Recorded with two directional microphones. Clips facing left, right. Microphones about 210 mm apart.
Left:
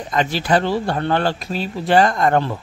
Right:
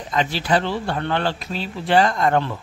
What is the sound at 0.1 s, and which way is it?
Speech, 45° left (ahead or behind).